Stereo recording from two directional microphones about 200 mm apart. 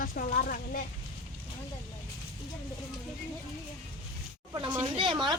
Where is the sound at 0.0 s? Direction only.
45° left (ahead or behind).